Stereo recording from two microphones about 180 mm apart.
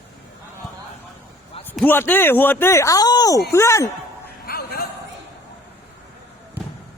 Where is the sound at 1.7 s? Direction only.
10° left (ahead or behind).